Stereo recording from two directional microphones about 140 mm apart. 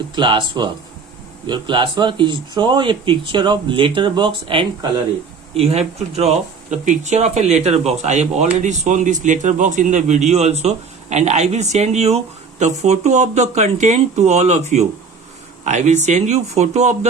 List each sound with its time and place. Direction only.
0.2 s speech: 35° right (ahead or behind)
5.5 s a man's voice: 50° right (ahead or behind)